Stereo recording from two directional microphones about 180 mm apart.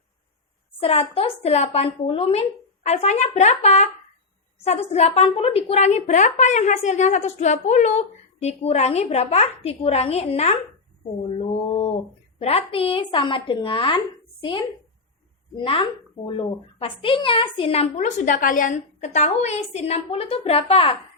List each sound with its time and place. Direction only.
0.8 s speech: 30° left (ahead or behind)
11.3 s mantra: 35° left (ahead or behind)
12.4 s a woman's voice: 35° left (ahead or behind)
15.5 s speech: 30° left (ahead or behind)